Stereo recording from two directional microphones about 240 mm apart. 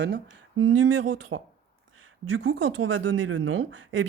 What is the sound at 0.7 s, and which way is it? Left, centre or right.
Speech, right.